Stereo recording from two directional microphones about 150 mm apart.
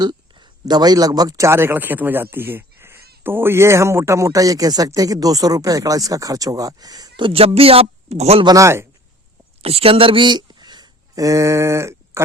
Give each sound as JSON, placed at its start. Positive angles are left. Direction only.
{"t": 0.0, "sound": "a man's voice", "side_deg": -30}
{"t": 7.2, "sound": "speech", "side_deg": -40}
{"t": 8.4, "sound": "a man's voice", "side_deg": -20}
{"t": 9.6, "sound": "speech", "side_deg": -40}